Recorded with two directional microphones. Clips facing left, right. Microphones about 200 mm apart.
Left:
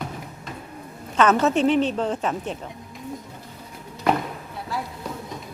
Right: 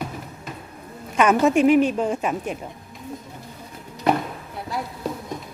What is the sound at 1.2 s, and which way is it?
A woman's voice, 10° right (ahead or behind).